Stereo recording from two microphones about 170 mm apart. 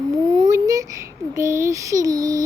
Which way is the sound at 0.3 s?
25° right (ahead or behind).